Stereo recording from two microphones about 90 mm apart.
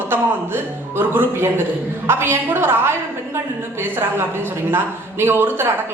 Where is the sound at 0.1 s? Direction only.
25° right (ahead or behind).